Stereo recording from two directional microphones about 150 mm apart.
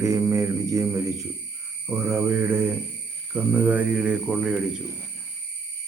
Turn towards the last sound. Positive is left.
turn(degrees=-5)  # may be behind; listen again after turning